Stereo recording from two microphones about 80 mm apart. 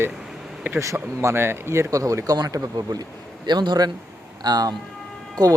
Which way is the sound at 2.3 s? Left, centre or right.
Right.